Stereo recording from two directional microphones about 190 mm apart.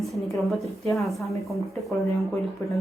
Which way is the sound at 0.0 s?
Centre (ahead or behind).